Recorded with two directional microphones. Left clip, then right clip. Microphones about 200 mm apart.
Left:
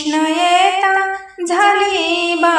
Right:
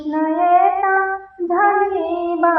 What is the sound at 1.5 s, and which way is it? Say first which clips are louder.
Child singing: left 3 dB; 45° left (ahead or behind).